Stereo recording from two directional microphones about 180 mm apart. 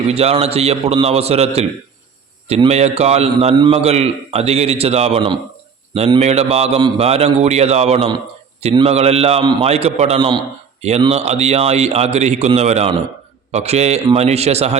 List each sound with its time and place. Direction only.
0.1 s a man's voice: 35° right (ahead or behind)